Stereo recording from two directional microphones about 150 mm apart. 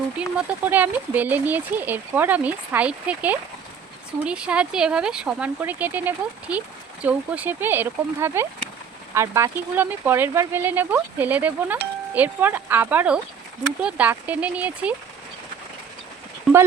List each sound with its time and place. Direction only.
0.2 s speech: 10° right (ahead or behind)